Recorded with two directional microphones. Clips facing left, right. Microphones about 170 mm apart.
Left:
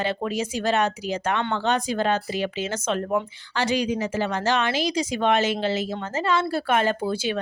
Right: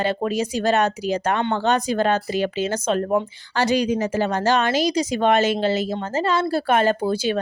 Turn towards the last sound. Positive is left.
turn(degrees=-40)  # may be behind; listen again after turning